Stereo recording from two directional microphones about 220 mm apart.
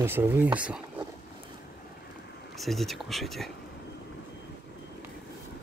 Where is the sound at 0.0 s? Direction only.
10° right (ahead or behind).